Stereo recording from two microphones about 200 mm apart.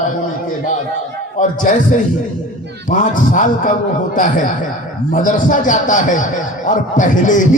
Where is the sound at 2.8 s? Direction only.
40° left (ahead or behind).